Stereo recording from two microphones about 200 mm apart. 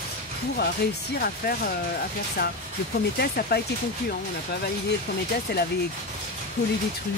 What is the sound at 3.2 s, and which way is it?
Speech, 50° left (ahead or behind).